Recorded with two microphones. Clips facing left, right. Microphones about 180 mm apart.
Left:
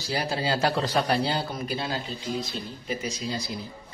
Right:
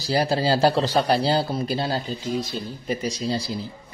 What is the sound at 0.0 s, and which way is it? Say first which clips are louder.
Speech: right 6 dB; 35° right (ahead or behind).